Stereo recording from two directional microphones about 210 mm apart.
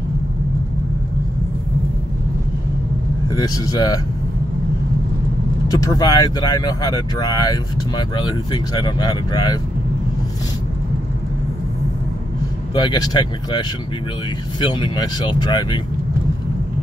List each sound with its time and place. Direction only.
3.3 s speech: 20° left (ahead or behind)
5.7 s speech: 15° left (ahead or behind)
12.7 s speech: 20° left (ahead or behind)
14.7 s speech: 20° left (ahead or behind)